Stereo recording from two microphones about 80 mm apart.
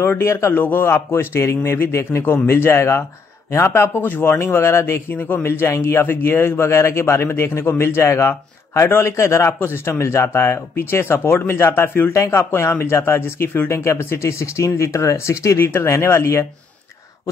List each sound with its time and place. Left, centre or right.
0.0 s a man's voice: left
12.1 s a man's voice: left